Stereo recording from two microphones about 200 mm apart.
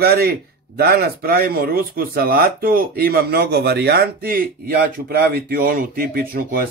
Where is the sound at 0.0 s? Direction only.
50° right (ahead or behind).